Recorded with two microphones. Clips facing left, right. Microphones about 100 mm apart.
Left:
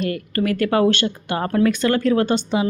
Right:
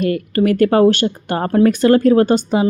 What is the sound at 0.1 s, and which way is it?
Speech, 35° right (ahead or behind).